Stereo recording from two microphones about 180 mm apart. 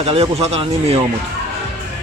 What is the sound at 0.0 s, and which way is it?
Speech, 35° right (ahead or behind).